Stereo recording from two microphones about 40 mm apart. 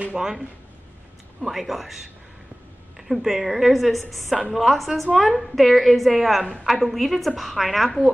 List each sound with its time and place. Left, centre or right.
0.1 s speech: centre
1.4 s a woman's voice: centre
3.0 s a woman's voice: centre